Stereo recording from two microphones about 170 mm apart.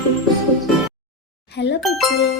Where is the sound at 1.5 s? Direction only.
85° left.